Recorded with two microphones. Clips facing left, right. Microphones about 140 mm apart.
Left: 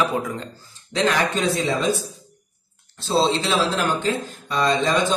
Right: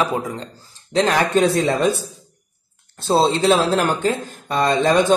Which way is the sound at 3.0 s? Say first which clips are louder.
Right 4 dB; 50° right (ahead or behind).